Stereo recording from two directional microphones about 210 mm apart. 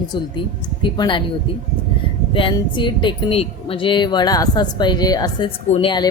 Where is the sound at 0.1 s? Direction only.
20° left (ahead or behind).